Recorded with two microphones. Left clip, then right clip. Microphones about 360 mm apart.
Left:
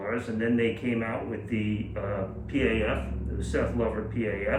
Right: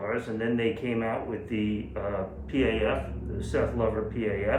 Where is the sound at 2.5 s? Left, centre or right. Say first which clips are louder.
Right 1 dB; centre.